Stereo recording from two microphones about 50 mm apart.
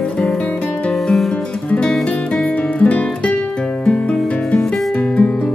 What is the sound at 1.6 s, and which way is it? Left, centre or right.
Music, left.